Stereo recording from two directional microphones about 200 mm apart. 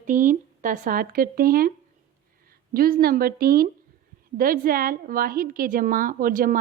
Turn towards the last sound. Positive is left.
turn(degrees=-45)  # may be behind; listen again after turning